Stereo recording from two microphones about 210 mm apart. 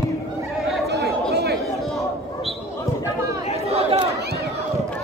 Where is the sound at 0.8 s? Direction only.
50° right (ahead or behind).